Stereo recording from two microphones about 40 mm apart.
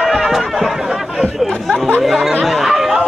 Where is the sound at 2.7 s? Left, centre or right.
Centre.